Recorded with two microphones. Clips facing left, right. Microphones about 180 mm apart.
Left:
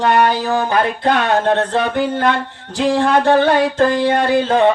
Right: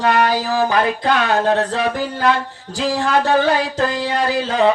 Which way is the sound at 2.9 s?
55° left (ahead or behind).